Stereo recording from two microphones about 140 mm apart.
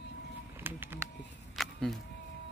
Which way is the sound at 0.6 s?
15° right (ahead or behind).